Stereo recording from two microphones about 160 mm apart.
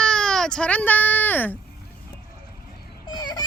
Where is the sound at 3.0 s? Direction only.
25° left (ahead or behind).